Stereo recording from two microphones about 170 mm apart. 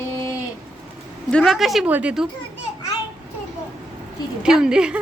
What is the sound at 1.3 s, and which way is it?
A woman's voice, 5° left (ahead or behind).